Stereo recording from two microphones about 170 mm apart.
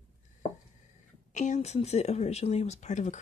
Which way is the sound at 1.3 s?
45° left (ahead or behind).